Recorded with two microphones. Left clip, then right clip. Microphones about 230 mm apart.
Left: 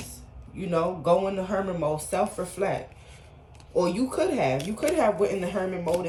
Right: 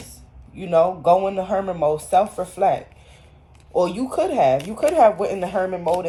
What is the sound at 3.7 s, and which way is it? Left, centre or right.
Speech, right.